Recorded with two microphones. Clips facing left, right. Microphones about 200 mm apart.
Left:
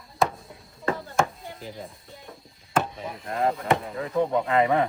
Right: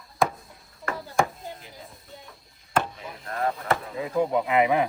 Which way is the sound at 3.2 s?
20° left (ahead or behind).